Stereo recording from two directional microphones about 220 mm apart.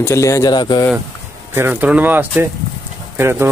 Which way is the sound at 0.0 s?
15° left (ahead or behind).